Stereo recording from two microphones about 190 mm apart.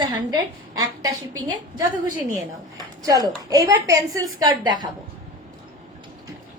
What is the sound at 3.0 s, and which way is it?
A woman's voice, 20° right (ahead or behind).